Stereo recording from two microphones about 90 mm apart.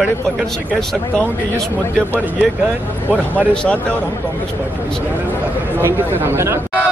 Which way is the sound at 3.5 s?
10° left (ahead or behind).